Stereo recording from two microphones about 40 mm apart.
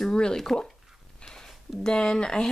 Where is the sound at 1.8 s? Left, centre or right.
Centre.